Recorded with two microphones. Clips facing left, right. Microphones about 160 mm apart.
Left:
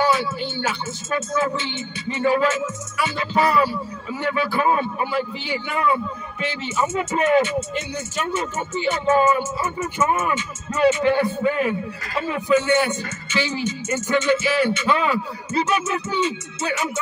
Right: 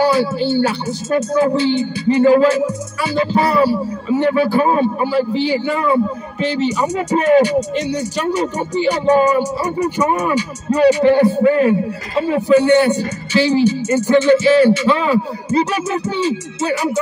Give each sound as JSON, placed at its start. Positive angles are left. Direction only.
{"t": 0.0, "sound": "speech", "side_deg": -35}